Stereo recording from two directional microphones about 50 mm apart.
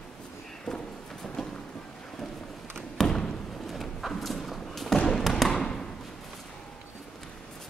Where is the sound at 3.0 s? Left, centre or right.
Centre.